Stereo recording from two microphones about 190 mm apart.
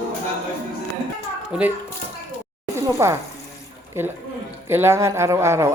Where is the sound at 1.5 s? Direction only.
5° right (ahead or behind).